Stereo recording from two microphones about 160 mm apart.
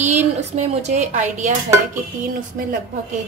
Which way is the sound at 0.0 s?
45° right (ahead or behind).